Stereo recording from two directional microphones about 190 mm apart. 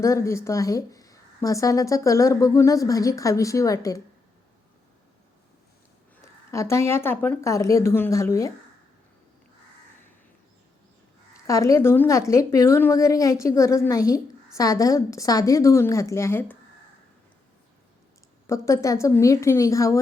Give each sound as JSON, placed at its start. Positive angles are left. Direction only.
{"t": 0.0, "sound": "speech", "side_deg": 15}
{"t": 6.2, "sound": "speech", "side_deg": 15}
{"t": 11.4, "sound": "speech", "side_deg": 15}
{"t": 18.4, "sound": "speech", "side_deg": 15}